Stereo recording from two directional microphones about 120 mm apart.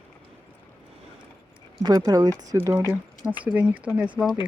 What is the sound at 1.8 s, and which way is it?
Speech, 35° right (ahead or behind).